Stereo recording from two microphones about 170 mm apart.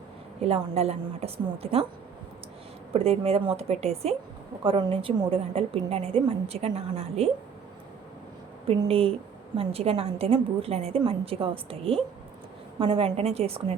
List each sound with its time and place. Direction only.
0.4 s a woman's voice: 35° right (ahead or behind)
2.9 s a woman's voice: 35° right (ahead or behind)
8.6 s a woman's voice: 35° right (ahead or behind)